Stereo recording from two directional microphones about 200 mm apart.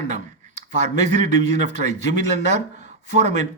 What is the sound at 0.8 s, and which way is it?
A man's voice, 35° right (ahead or behind).